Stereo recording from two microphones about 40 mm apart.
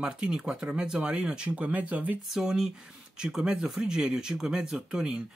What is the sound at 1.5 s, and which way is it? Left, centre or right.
Speech, right.